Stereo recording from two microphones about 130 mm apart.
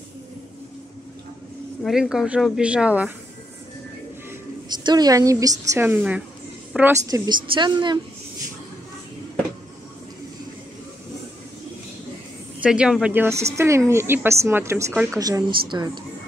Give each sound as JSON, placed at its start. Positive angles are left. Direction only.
{"t": 1.8, "sound": "speech", "side_deg": -5}
{"t": 4.7, "sound": "a woman's voice", "side_deg": -30}
{"t": 5.9, "sound": "a woman's voice", "side_deg": -10}
{"t": 7.1, "sound": "a woman's voice", "side_deg": -25}
{"t": 12.6, "sound": "a woman's voice", "side_deg": -10}